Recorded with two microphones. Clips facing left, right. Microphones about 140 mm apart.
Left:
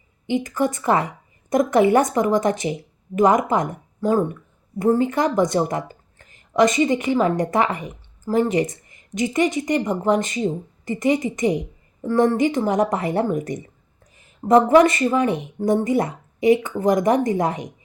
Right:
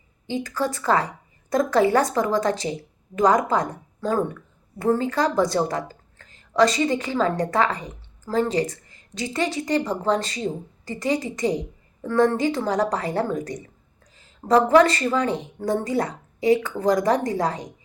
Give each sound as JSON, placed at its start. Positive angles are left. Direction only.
{"t": 0.3, "sound": "speech", "side_deg": 20}